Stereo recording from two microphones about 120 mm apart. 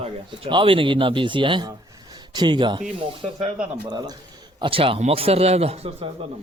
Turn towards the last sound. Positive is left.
turn(degrees=-55)  # may be behind; listen again after turning